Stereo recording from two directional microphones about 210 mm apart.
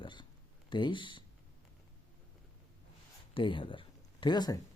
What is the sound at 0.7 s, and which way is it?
Speech, 20° left (ahead or behind).